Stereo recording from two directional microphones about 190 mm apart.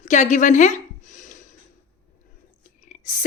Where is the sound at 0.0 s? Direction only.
40° left (ahead or behind).